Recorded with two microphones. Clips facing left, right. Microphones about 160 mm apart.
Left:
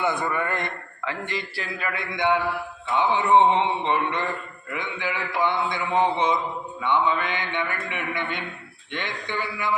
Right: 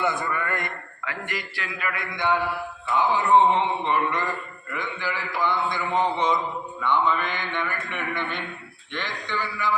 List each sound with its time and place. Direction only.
0.0 s a man's voice: 20° left (ahead or behind)
9.0 s a man's voice: 55° left (ahead or behind)